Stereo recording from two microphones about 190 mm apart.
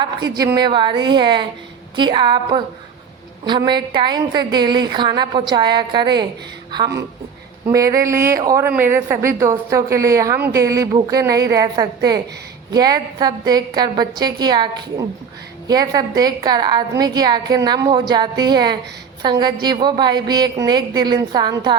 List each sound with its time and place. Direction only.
0.0 s a woman's voice: 20° right (ahead or behind)